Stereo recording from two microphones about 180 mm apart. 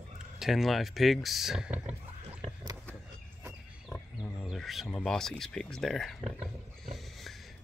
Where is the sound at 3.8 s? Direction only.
10° left (ahead or behind).